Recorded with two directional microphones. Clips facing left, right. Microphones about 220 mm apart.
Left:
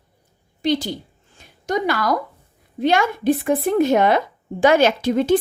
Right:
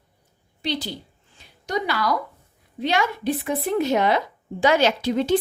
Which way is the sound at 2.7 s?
50° left (ahead or behind).